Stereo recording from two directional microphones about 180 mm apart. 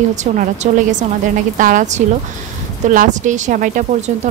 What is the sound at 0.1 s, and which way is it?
A woman's voice, 40° right (ahead or behind).